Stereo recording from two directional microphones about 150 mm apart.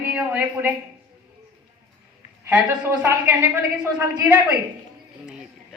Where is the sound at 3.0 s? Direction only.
15° right (ahead or behind).